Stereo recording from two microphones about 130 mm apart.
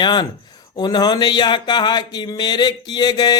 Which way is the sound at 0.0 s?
35° left (ahead or behind).